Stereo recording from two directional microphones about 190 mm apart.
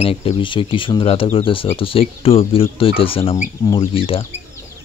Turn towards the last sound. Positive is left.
turn(degrees=30)  # may be behind; listen again after turning